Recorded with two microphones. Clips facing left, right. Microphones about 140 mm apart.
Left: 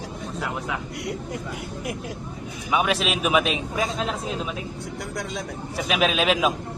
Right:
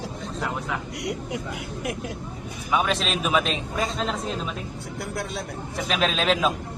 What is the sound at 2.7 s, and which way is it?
A man's voice, 5° left (ahead or behind).